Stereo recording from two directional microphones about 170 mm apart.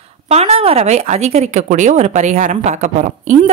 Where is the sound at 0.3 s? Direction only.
35° right (ahead or behind).